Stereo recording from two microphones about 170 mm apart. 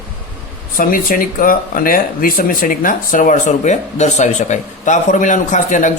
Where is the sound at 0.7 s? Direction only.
55° left (ahead or behind).